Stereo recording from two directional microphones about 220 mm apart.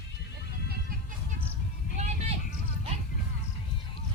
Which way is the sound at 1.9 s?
30° right (ahead or behind).